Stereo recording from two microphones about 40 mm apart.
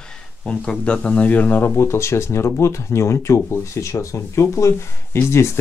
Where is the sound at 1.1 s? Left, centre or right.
Left.